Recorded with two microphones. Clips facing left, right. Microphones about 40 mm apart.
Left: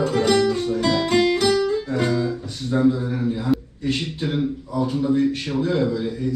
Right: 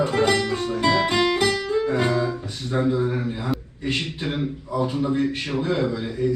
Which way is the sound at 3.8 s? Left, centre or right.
Right.